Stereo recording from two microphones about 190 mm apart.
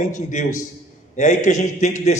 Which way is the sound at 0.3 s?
40° left (ahead or behind).